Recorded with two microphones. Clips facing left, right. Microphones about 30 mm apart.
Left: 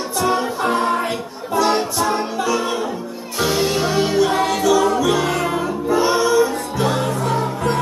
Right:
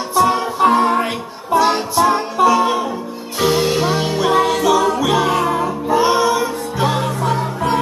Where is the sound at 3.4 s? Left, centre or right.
Centre.